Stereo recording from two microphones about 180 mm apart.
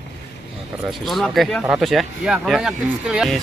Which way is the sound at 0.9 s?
Centre (ahead or behind).